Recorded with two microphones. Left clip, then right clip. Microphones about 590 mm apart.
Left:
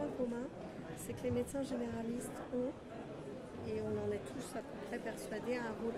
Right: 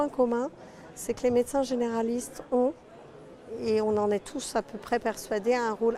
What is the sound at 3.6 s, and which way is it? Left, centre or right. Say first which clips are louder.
A woman's voice: right 15 dB; right.